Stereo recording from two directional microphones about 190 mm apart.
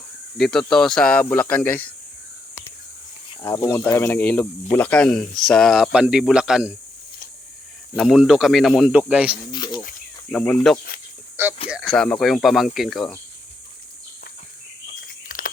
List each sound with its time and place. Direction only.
0.3 s speech: centre (ahead or behind)
3.4 s speech: 15° left (ahead or behind); by 6.7 s 5° right (ahead or behind)
7.9 s speech: centre (ahead or behind)
9.5 s insect: 25° left (ahead or behind)
10.3 s speech: 5° left (ahead or behind)
11.4 s a sound: 10° right (ahead or behind)
11.7 s a sound: 5° left (ahead or behind)
12.2 s speech: centre (ahead or behind)
15.0 s a sound: 50° left (ahead or behind)